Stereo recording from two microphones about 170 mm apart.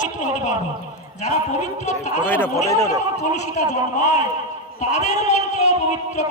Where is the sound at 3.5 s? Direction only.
45° left (ahead or behind).